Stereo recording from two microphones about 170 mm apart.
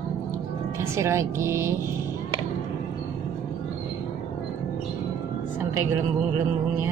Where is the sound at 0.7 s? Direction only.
15° right (ahead or behind).